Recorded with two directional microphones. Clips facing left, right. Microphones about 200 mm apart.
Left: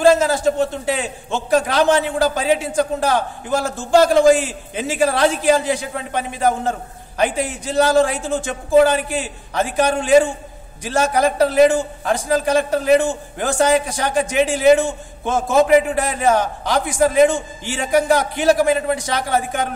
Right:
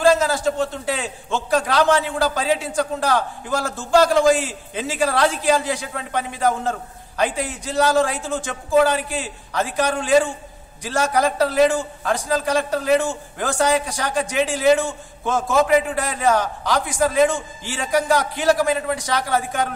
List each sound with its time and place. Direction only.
0.0 s a man's voice: 25° left (ahead or behind)